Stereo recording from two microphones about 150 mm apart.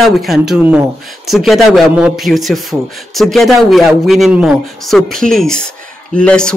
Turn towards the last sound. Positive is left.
turn(degrees=5)  # may be behind; listen again after turning